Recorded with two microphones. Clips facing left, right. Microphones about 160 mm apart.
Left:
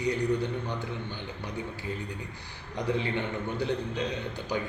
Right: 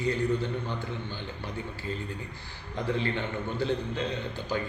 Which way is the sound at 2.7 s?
15° left (ahead or behind).